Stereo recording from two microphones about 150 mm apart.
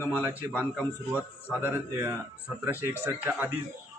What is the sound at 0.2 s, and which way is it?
A man's voice, 15° right (ahead or behind).